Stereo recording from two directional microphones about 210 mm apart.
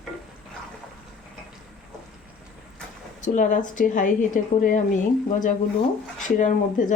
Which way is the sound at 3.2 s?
35° left (ahead or behind).